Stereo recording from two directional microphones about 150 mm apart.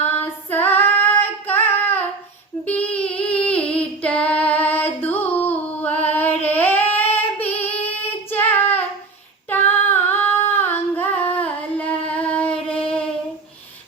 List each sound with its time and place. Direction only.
0.2 s female singing: 10° left (ahead or behind)
2.7 s singing: 10° left (ahead or behind)
6.1 s a sound: 10° left (ahead or behind)
7.2 s female singing: 10° left (ahead or behind)